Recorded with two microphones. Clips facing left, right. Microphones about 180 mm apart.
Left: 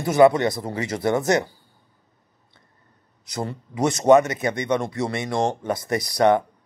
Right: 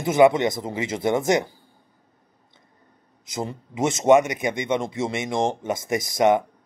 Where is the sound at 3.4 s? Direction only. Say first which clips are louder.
Left 1 dB; 20° right (ahead or behind).